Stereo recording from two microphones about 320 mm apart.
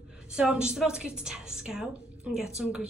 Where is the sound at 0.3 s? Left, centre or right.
Centre.